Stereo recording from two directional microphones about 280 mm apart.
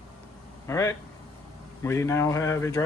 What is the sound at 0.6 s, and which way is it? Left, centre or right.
Speech, centre.